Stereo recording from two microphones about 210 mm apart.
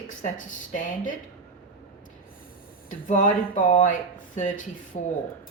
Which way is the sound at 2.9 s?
40° left (ahead or behind).